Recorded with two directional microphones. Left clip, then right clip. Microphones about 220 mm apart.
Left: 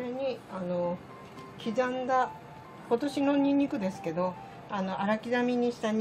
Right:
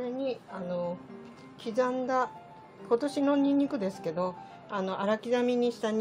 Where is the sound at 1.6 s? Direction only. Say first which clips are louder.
Right 1 dB; 30° right (ahead or behind).